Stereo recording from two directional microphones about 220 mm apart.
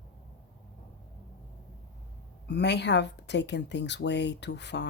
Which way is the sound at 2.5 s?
50° left (ahead or behind).